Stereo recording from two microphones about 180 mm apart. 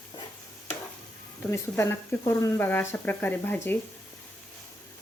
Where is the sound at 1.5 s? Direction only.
15° left (ahead or behind).